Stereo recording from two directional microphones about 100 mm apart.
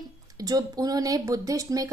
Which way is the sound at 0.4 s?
40° right (ahead or behind).